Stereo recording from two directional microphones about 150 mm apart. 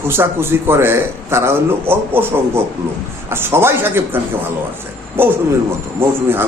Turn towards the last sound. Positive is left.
turn(degrees=-15)  # may be behind; listen again after turning